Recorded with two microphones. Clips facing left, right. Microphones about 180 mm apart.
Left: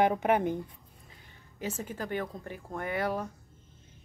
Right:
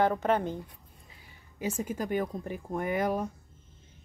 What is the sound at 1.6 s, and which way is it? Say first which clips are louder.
A woman's voice: right 4 dB; 10° right (ahead or behind).